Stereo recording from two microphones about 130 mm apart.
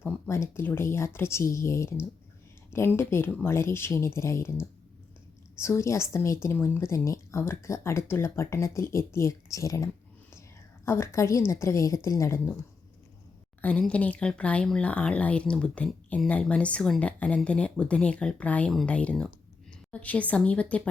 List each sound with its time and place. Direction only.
0.0 s speech: 20° left (ahead or behind)
13.6 s speech: 10° left (ahead or behind)